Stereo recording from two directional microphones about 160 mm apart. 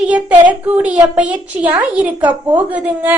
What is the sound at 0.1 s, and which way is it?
A child's voice, 10° right (ahead or behind).